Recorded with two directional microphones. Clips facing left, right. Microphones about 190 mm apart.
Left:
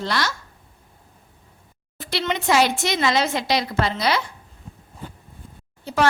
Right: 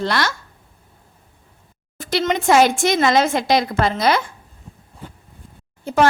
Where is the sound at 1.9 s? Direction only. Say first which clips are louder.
Right 5 dB; 45° right (ahead or behind).